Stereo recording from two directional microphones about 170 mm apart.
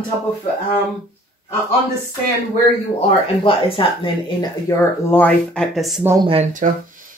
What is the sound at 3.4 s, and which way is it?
Speech, 30° left (ahead or behind).